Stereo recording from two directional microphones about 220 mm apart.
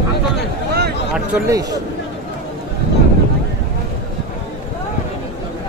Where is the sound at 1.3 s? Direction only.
15° right (ahead or behind).